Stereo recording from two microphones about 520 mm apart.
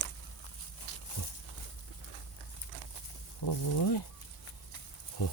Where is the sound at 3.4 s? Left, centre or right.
Left.